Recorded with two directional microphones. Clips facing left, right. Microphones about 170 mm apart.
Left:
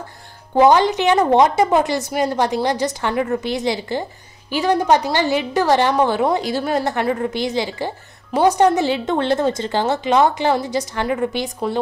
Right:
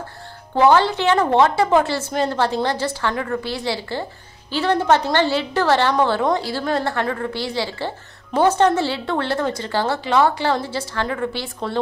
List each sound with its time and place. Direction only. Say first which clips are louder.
0.6 s a woman's voice: left 2 dB; 15° left (ahead or behind)